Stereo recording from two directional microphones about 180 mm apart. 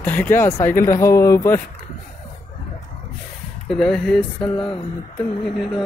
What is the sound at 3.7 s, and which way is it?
Speech, centre (ahead or behind).